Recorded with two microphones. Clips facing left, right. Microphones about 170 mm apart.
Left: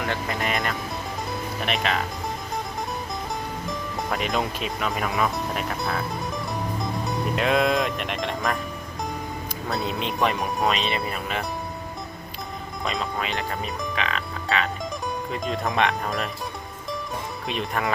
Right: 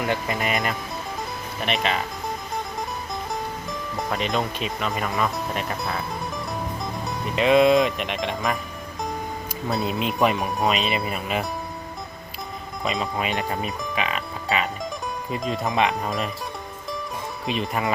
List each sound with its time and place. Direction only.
0.1 s speech: 15° right (ahead or behind)
1.6 s speech: centre (ahead or behind)
3.7 s speech: centre (ahead or behind)
9.6 s speech: centre (ahead or behind)
12.8 s speech: centre (ahead or behind)
13.1 s speech: 20° right (ahead or behind)
13.6 s speech: 5° right (ahead or behind)
17.4 s speech: centre (ahead or behind)